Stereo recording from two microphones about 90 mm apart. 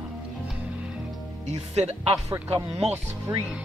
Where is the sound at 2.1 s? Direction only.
40° right (ahead or behind).